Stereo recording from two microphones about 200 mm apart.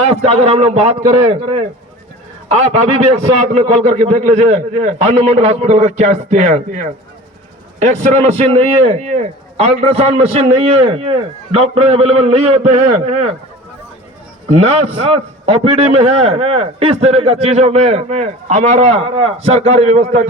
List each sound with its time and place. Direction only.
0.1 s a man's voice: 30° right (ahead or behind)
14.5 s a man's voice: 30° right (ahead or behind)